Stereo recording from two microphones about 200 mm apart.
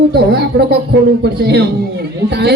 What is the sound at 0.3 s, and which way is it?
A man's voice, 55° right (ahead or behind).